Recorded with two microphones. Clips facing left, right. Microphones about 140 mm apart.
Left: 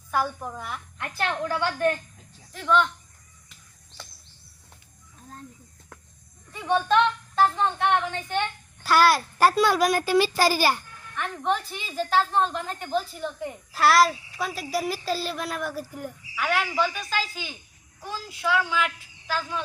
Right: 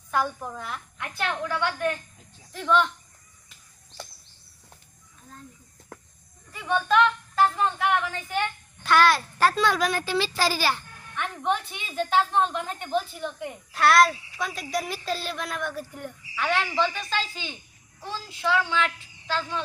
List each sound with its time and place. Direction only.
0.1 s a woman's voice: 5° left (ahead or behind)
1.2 s a woman's voice: 30° left (ahead or behind)
2.5 s speech: centre (ahead or behind)
6.5 s speech: 30° left (ahead or behind)
6.8 s music: centre (ahead or behind)
8.3 s a child's voice: centre (ahead or behind)
11.1 s a woman's voice: centre (ahead or behind)